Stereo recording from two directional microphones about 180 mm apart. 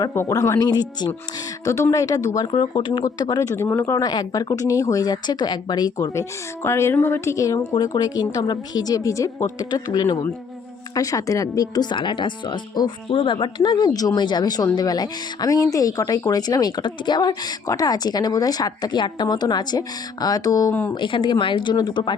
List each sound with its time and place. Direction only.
0.0 s speech: 15° left (ahead or behind)
20.9 s speech: 25° left (ahead or behind)